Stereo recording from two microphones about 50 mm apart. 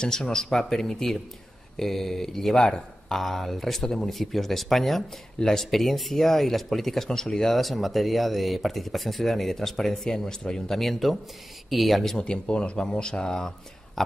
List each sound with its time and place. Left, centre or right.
0.0 s speech: centre
12.2 s speech: centre